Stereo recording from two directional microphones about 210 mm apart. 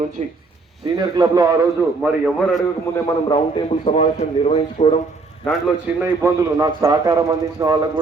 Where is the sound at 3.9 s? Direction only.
25° left (ahead or behind).